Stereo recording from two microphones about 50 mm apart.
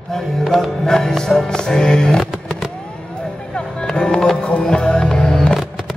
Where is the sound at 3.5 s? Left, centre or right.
Centre.